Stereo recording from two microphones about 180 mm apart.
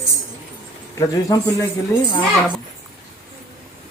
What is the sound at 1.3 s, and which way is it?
Speech, 20° left (ahead or behind).